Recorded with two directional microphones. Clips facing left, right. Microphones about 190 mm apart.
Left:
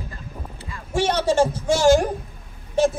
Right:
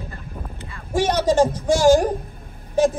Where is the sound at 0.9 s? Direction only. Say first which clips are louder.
Right 2 dB; 10° right (ahead or behind).